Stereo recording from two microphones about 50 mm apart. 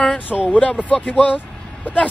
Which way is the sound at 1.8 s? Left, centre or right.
Left.